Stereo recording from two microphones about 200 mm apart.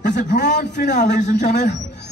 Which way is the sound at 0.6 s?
40° left (ahead or behind).